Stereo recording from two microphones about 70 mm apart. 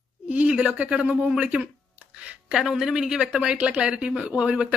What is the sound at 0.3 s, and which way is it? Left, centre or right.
Speech, centre.